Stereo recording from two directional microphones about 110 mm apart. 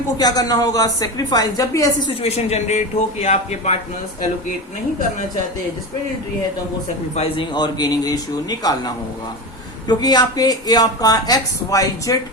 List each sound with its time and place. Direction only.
0.2 s speech: 35° left (ahead or behind)
2.2 s speech: 75° left (ahead or behind)
7.5 s speech: 40° left (ahead or behind)